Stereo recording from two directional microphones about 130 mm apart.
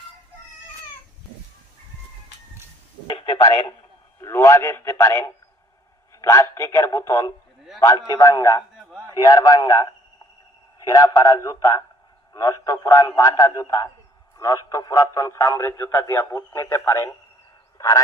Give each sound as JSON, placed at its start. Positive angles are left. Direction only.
{"t": 4.2, "sound": "speech", "side_deg": 20}